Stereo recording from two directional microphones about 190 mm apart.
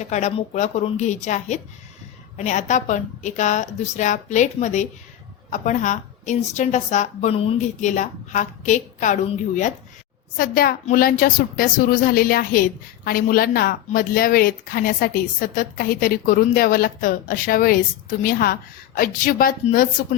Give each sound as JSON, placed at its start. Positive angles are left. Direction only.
{"t": 0.0, "sound": "a woman's voice", "side_deg": 35}
{"t": 10.3, "sound": "a woman's voice", "side_deg": 50}